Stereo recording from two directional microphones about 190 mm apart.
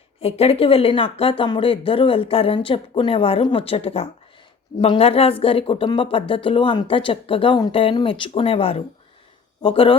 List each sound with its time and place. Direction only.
0.2 s speech: 30° left (ahead or behind)